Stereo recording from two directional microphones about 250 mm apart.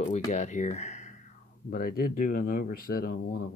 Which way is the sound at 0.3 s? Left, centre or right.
Left.